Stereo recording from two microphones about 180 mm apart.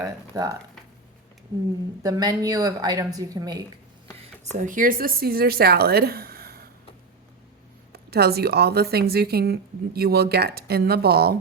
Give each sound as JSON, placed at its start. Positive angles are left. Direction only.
{"t": 0.0, "sound": "a woman's voice", "side_deg": -20}
{"t": 2.0, "sound": "a woman's voice", "side_deg": -20}
{"t": 4.2, "sound": "speech", "side_deg": -45}
{"t": 7.9, "sound": "a woman's voice", "side_deg": -60}